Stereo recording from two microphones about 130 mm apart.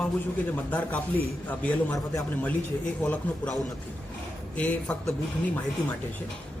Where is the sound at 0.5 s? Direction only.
10° left (ahead or behind).